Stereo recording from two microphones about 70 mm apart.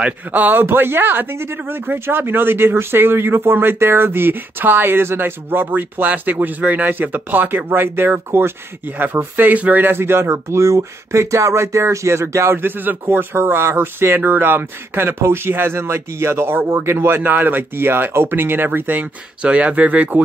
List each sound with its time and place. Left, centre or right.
0.0 s speech: right
12.6 s speech: right
19.4 s speech: centre